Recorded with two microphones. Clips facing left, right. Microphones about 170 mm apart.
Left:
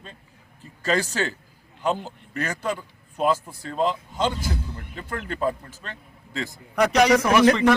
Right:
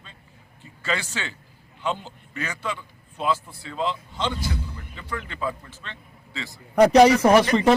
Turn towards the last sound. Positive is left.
turn(degrees=-35)  # may be behind; listen again after turning